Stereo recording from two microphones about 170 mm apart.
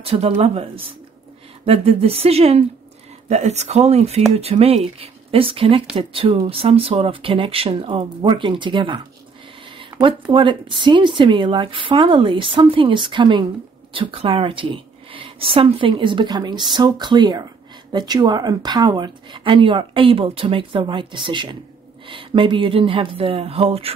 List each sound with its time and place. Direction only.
0.0 s speech: 35° right (ahead or behind)
1.7 s speech: 35° right (ahead or behind)
9.8 s a sound: 30° right (ahead or behind)
10.3 s speech: 30° right (ahead or behind)